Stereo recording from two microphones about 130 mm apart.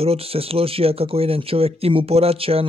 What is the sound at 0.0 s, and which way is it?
Speech, 50° right (ahead or behind).